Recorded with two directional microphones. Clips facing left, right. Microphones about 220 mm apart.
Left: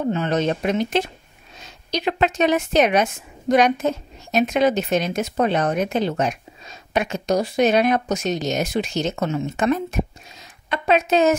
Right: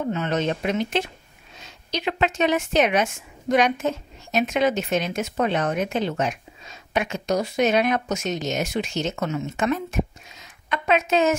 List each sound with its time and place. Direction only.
0.1 s a woman's voice: 35° left (ahead or behind)